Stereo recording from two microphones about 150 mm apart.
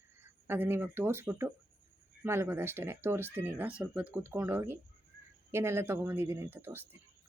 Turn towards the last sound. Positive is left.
turn(degrees=-15)  # may be behind; listen again after turning